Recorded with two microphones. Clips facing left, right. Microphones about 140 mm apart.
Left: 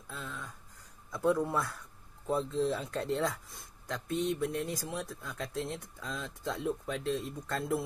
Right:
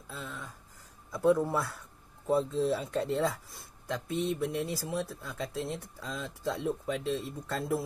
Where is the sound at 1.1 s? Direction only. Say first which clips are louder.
Right 3 dB; 5° right (ahead or behind).